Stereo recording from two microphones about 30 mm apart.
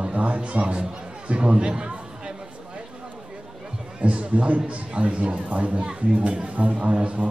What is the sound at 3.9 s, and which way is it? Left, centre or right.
A man's voice, right.